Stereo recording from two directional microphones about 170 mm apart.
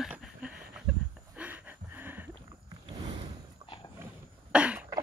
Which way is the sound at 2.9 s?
25° right (ahead or behind).